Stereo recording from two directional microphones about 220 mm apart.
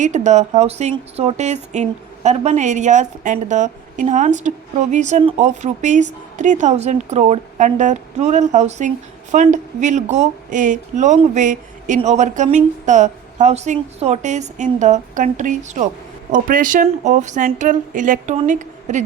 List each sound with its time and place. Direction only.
0.0 s speech: 35° right (ahead or behind)